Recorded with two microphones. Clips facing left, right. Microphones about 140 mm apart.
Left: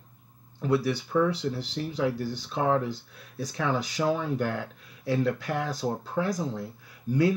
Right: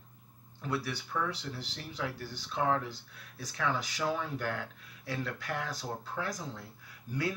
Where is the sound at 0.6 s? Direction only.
20° left (ahead or behind).